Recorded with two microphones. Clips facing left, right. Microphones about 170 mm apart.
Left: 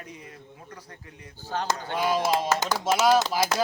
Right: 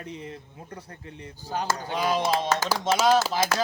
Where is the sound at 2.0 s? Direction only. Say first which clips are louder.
Even; 5° left (ahead or behind).